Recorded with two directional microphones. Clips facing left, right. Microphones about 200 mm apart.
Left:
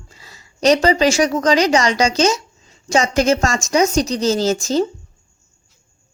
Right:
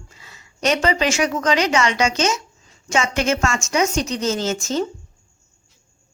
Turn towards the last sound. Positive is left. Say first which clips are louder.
# left 5 dB
turn(degrees=35)  # may be behind; listen again after turning